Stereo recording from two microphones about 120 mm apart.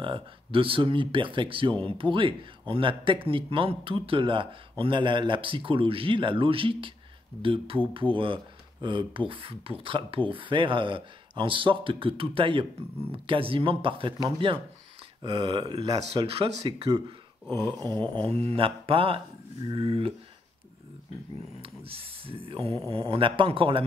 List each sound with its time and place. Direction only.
0.0 s a man's voice: 45° right (ahead or behind)
15.5 s a man's voice: 35° right (ahead or behind)
18.1 s a man's voice: 55° right (ahead or behind)
21.5 s a man's voice: 50° right (ahead or behind)